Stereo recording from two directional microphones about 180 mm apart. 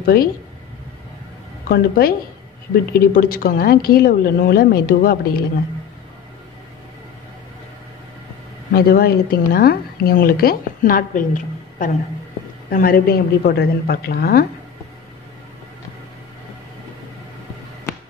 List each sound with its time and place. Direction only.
0.0 s speech: 55° left (ahead or behind)
1.7 s speech: 60° left (ahead or behind)
8.7 s speech: 55° left (ahead or behind)